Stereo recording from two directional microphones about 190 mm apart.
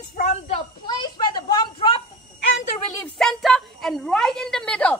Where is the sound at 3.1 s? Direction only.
Centre (ahead or behind).